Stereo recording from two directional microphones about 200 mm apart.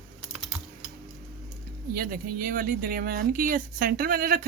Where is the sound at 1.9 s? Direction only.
45° right (ahead or behind).